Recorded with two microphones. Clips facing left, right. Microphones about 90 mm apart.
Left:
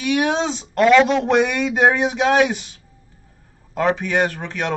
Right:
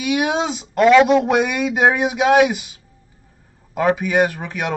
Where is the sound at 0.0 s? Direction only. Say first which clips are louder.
Even; 5° right (ahead or behind).